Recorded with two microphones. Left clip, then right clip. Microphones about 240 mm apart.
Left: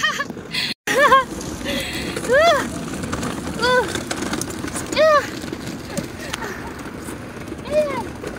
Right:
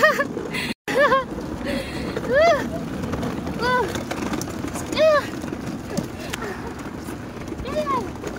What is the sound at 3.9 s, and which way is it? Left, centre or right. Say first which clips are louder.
Vehicle: left 2 dB; centre.